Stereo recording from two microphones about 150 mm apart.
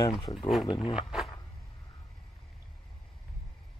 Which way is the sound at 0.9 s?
Centre (ahead or behind).